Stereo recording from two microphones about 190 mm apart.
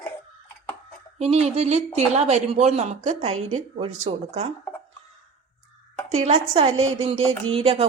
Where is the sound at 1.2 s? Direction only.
35° right (ahead or behind).